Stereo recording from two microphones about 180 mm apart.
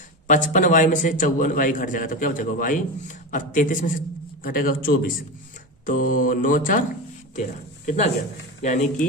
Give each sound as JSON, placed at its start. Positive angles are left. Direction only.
{"t": 0.3, "sound": "a man's voice", "side_deg": 45}